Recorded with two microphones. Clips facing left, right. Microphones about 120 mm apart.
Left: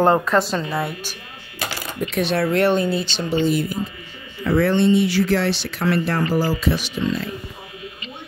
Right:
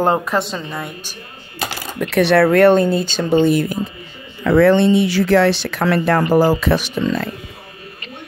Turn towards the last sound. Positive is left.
turn(degrees=-55)  # may be behind; listen again after turning